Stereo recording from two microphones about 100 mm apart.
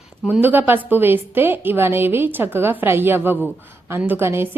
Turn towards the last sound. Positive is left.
turn(degrees=-25)  # may be behind; listen again after turning